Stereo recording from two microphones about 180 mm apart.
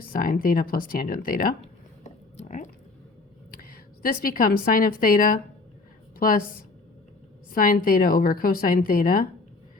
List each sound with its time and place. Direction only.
0.0 s a woman's voice: 55° left (ahead or behind)
2.0 s a sound: 40° left (ahead or behind)
3.6 s a woman's voice: 55° left (ahead or behind)